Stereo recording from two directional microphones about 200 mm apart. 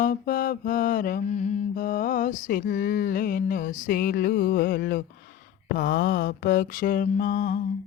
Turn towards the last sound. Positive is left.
turn(degrees=40)  # may be behind; listen again after turning